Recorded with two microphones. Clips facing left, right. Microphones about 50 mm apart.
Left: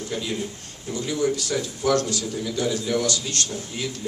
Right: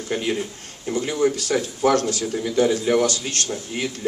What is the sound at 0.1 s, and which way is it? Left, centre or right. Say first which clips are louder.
A man's voice: right 6 dB; right.